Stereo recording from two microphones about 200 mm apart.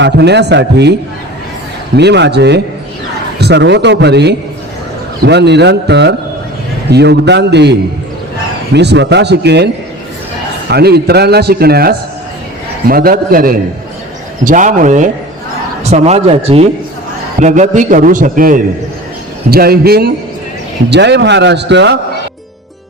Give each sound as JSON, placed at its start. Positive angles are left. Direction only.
{"t": 0.0, "sound": "speech", "side_deg": -60}
{"t": 2.0, "sound": "speech", "side_deg": -60}
{"t": 10.7, "sound": "a man's voice", "side_deg": -55}